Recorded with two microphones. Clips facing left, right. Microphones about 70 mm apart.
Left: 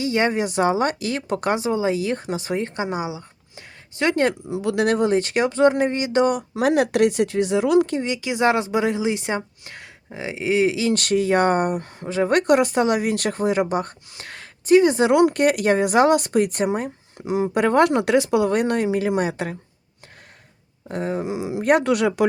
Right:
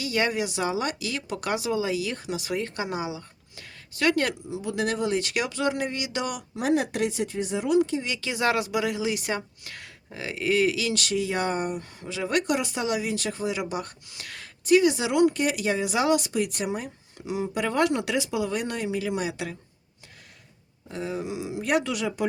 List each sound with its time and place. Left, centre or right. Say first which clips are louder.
0.0 s speech: left 5 dB; left
4.4 s speech: left 7 dB; left
4.9 s speech: left 7 dB; left
6.5 s speech: left 6 dB; left
8.0 s speech: left 6 dB; left
10.9 s speech: left 8 dB; left
11.9 s speech: left 7 dB; left
15.1 s speech: left 6 dB; left
20.8 s speech: left 6 dB; left